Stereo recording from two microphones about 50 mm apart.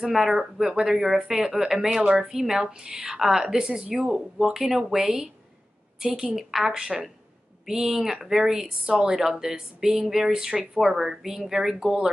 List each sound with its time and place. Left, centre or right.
0.0 s speech: centre
2.1 s a woman's voice: right